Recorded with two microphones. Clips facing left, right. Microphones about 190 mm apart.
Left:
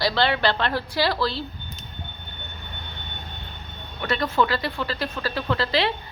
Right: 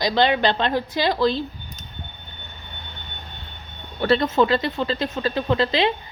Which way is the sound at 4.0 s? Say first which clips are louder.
Right 5 dB; 30° right (ahead or behind).